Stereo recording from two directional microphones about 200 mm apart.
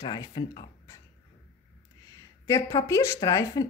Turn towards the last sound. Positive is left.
turn(degrees=20)  # may be behind; listen again after turning